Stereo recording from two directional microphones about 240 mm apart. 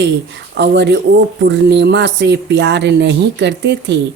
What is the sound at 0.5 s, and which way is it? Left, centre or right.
Speech, right.